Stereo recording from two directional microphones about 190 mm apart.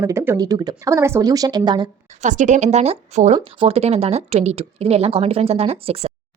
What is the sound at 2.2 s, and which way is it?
Speech, 40° right (ahead or behind).